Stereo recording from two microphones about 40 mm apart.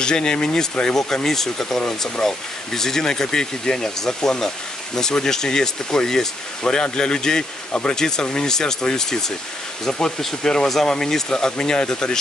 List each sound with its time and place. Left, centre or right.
0.0 s speech: centre